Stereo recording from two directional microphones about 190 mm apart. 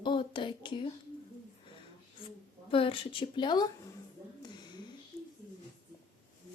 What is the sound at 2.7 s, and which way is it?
Speech, 30° left (ahead or behind).